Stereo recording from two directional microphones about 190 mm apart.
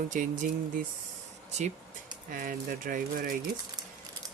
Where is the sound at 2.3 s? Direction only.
45° right (ahead or behind).